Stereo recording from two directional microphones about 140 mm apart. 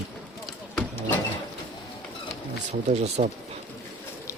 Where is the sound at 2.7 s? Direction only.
50° right (ahead or behind).